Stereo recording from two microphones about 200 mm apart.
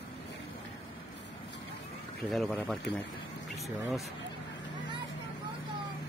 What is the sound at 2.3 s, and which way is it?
Speech, centre (ahead or behind).